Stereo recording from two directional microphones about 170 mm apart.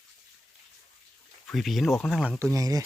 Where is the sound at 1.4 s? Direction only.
Centre (ahead or behind).